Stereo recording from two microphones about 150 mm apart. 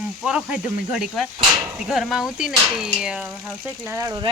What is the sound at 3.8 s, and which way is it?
Speech, 20° right (ahead or behind).